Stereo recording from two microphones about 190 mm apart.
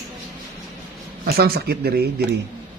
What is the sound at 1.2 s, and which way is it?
Speech, 50° right (ahead or behind).